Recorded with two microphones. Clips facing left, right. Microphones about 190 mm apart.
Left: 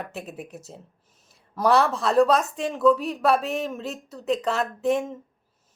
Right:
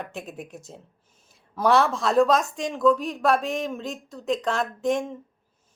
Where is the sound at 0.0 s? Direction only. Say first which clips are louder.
Even; 5° left (ahead or behind).